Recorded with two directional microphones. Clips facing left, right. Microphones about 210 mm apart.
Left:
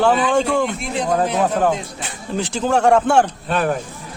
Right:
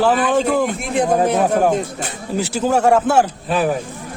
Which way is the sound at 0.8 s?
50° right (ahead or behind).